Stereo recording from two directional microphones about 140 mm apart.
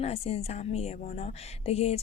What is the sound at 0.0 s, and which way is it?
A woman's voice, 45° left (ahead or behind).